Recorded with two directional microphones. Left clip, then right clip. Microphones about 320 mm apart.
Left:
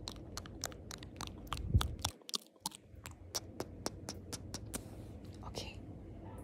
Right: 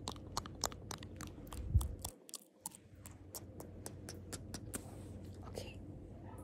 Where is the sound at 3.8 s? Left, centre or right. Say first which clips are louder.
Left 7 dB; centre.